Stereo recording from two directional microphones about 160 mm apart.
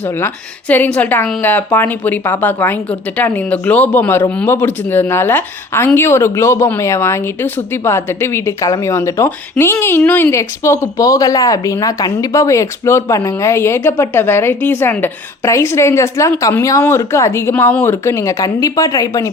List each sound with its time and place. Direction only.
0.7 s a woman's voice: 10° left (ahead or behind)